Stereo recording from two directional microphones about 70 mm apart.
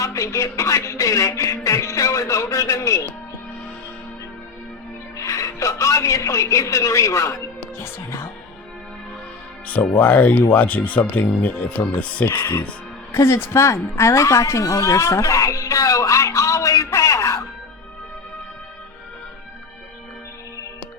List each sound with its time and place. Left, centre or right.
0.0 s speech: left
5.1 s speech: left
7.8 s music: left
10.0 s speech: left
12.3 s speech: left
13.1 s a woman's voice: left